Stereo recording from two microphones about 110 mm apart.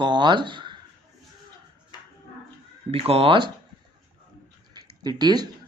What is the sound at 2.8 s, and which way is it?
Speech, 60° right (ahead or behind).